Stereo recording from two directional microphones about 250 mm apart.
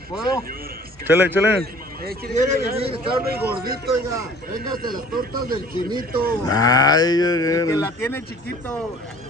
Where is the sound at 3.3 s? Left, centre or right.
Right.